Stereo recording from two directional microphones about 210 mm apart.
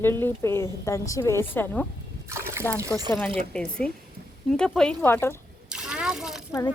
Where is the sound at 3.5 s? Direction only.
5° left (ahead or behind).